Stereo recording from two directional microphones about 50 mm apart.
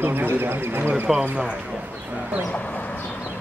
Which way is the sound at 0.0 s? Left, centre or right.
Right.